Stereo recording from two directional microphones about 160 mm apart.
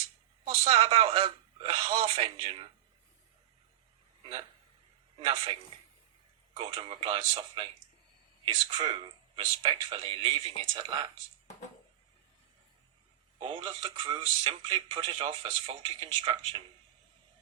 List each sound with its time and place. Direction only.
0.4 s speech: 40° right (ahead or behind)
4.2 s speech: 30° right (ahead or behind)
6.6 s speech: 30° right (ahead or behind)
8.7 s speech: 30° right (ahead or behind)
13.4 s speech: 30° right (ahead or behind)